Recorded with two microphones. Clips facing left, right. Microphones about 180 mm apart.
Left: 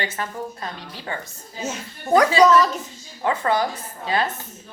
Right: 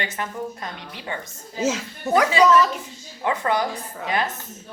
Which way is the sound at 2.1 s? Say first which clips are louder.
Left 2 dB; 35° left (ahead or behind).